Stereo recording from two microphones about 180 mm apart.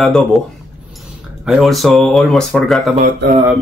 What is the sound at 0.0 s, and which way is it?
Speech, centre (ahead or behind).